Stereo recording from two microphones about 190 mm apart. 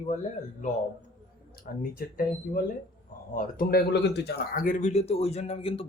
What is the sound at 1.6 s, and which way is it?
Speech, 50° left (ahead or behind).